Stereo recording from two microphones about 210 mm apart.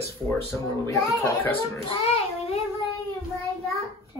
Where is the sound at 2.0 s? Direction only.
30° left (ahead or behind).